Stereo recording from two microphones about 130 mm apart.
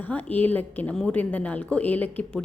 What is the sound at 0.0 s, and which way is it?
A woman's voice, 10° left (ahead or behind).